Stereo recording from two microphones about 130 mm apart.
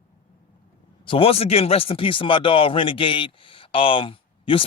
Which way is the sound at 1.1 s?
45° left (ahead or behind).